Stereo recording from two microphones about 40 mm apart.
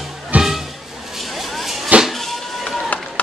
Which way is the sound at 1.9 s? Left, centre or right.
Right.